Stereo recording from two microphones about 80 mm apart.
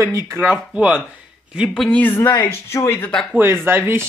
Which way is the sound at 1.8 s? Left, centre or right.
Left.